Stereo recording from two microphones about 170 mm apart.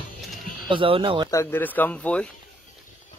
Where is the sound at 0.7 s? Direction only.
30° right (ahead or behind).